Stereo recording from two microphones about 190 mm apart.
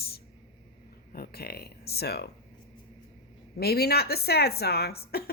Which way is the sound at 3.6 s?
55° left (ahead or behind).